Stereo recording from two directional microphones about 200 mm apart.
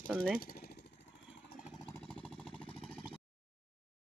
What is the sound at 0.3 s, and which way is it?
Vehicle, 50° left (ahead or behind).